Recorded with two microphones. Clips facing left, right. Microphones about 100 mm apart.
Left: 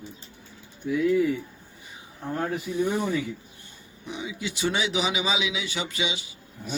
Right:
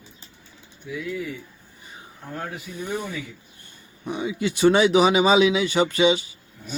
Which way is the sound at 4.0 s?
50° right (ahead or behind).